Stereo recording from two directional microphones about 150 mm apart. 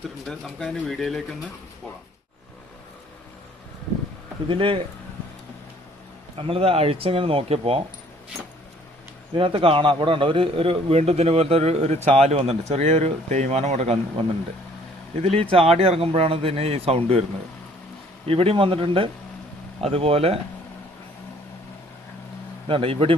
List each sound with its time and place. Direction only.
0.3 s speech: 5° left (ahead or behind)
4.4 s a man's voice: 35° right (ahead or behind)
6.5 s a man's voice: 40° right (ahead or behind)
9.4 s a man's voice: 35° right (ahead or behind)
18.3 s a man's voice: 40° right (ahead or behind)
22.7 s a man's voice: 40° right (ahead or behind)